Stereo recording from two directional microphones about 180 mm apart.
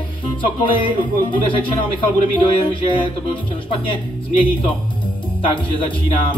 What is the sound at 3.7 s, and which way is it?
Speech, 30° left (ahead or behind).